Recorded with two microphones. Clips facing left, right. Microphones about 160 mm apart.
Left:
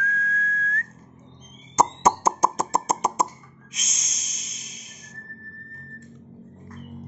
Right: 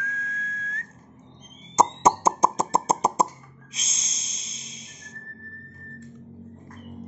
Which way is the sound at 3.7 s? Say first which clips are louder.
Even; 30° right (ahead or behind).